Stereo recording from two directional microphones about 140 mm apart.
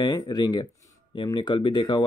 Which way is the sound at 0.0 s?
30° left (ahead or behind).